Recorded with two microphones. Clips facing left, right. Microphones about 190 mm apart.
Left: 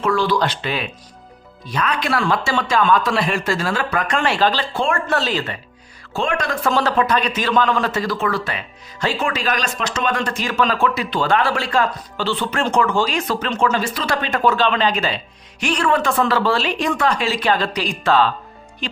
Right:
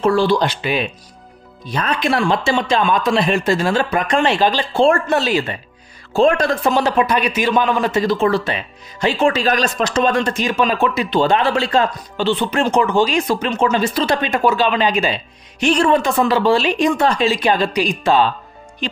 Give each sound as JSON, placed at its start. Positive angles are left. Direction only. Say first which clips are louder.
{"t": 0.0, "sound": "speech", "louder": "right 4 dB", "side_deg": -30}
{"t": 0.4, "sound": "a man's voice", "louder": "right 3 dB", "side_deg": -10}
{"t": 1.7, "sound": "speech", "louder": "right 1 dB", "side_deg": -30}
{"t": 2.0, "sound": "speech", "louder": "right 4 dB", "side_deg": -20}
{"t": 4.7, "sound": "speech", "louder": "right 7 dB", "side_deg": -35}
{"t": 5.0, "sound": "a man's voice", "louder": "right 4 dB", "side_deg": -15}
{"t": 6.1, "sound": "speech", "louder": "right 8 dB", "side_deg": -35}
{"t": 6.6, "sound": "a man's voice", "louder": "left 1 dB", "side_deg": -15}
{"t": 10.2, "sound": "a man's voice", "louder": "right 2 dB", "side_deg": -20}